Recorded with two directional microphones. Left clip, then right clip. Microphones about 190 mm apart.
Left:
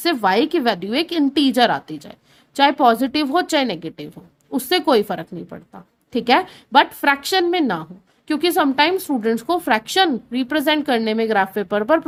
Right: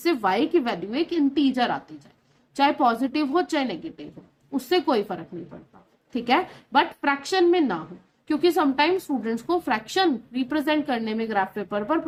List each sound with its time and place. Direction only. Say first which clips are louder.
0.0 s a woman's voice: left 5 dB; 50° left (ahead or behind)